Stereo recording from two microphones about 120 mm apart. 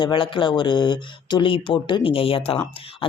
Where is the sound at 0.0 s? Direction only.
45° left (ahead or behind).